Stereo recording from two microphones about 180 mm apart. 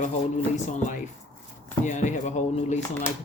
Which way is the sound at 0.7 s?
40° left (ahead or behind).